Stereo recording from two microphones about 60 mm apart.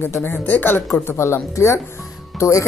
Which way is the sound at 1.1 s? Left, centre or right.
Left.